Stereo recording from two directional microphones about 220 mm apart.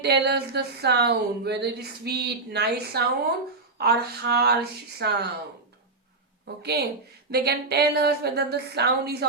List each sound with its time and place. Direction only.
0.0 s speech: 50° right (ahead or behind)
6.6 s speech: 45° right (ahead or behind)